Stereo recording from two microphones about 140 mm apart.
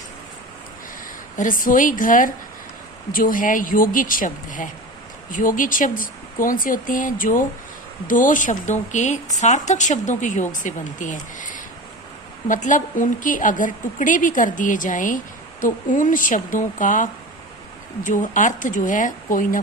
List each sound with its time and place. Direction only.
1.4 s a woman's voice: 75° left (ahead or behind)